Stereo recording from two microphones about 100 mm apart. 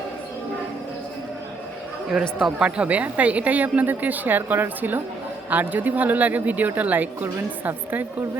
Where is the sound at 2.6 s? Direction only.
10° right (ahead or behind).